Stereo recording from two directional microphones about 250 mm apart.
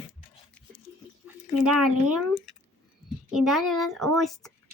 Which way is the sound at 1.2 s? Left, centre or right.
Centre.